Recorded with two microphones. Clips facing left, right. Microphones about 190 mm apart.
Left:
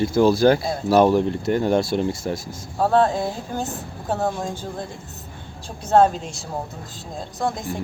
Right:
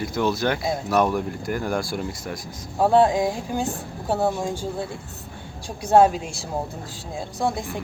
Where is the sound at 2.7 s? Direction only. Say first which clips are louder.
Right 1 dB; 10° right (ahead or behind).